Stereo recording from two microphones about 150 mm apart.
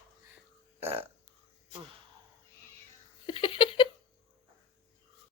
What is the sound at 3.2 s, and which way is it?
Giggle, 35° left (ahead or behind).